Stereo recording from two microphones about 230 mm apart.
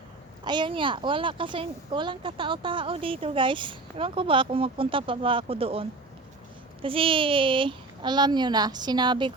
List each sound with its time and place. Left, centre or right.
0.4 s speech: centre
6.8 s speech: right